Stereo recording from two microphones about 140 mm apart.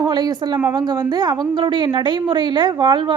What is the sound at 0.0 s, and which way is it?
A woman's voice, 30° right (ahead or behind).